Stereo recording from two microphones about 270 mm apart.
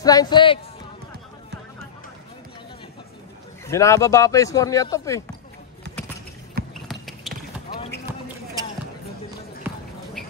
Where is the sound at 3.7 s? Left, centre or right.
Centre.